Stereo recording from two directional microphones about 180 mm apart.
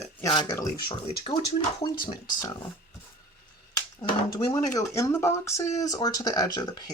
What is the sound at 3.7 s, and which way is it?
Speech, 20° left (ahead or behind).